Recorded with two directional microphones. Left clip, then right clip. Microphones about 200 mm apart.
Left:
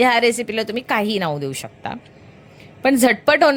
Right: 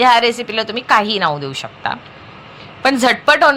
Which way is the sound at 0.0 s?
55° left (ahead or behind).